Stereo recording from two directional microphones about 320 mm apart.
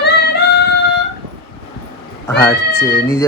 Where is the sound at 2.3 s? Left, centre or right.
Centre.